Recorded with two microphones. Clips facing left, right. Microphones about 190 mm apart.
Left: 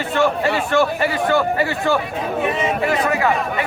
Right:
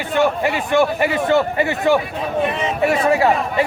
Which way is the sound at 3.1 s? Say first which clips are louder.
Right 3 dB; 30° right (ahead or behind).